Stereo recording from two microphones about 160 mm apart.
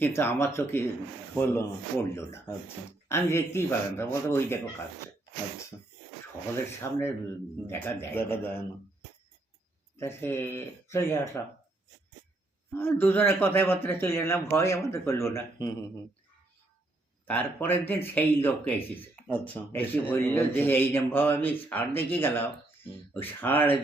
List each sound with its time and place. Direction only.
0.0 s speech: 15° left (ahead or behind)
6.8 s speech: 15° left (ahead or behind)
10.0 s speech: 15° left (ahead or behind)
12.7 s speech: 15° left (ahead or behind)
17.2 s speech: 10° left (ahead or behind)